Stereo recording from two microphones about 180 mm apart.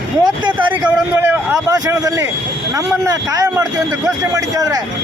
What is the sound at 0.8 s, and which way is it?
A man's voice, 10° right (ahead or behind).